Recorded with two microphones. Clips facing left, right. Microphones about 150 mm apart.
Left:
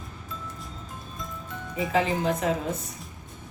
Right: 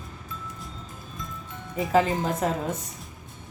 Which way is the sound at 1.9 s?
40° right (ahead or behind).